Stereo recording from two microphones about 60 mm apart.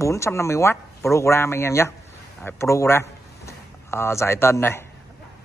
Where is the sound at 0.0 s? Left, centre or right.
Left.